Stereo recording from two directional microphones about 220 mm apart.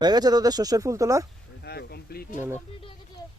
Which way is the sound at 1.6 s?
45° left (ahead or behind).